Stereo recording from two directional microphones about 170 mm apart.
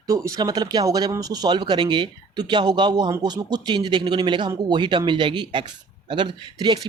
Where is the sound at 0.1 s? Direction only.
20° right (ahead or behind).